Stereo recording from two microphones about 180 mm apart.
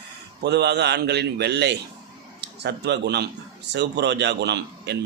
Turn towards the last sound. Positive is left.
turn(degrees=-70)  # may be behind; listen again after turning